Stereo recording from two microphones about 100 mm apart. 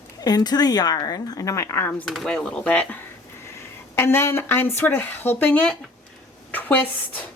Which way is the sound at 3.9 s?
25° left (ahead or behind).